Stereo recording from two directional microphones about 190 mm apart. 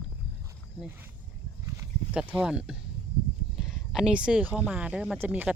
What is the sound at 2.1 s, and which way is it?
Speech, 5° right (ahead or behind).